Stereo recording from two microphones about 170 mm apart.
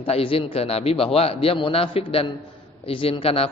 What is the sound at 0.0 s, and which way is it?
A man's voice, 35° left (ahead or behind).